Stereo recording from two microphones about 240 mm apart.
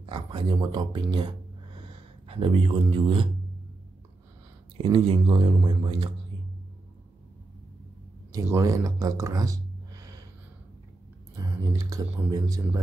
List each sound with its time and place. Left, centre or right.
0.0 s speech: right
4.7 s speech: right
8.3 s speech: centre
11.3 s speech: centre